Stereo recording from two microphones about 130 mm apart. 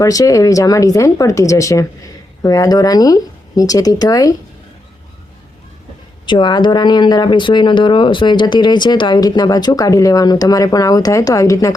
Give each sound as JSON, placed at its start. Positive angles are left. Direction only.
{"t": 0.0, "sound": "speech", "side_deg": 25}
{"t": 6.2, "sound": "speech", "side_deg": 35}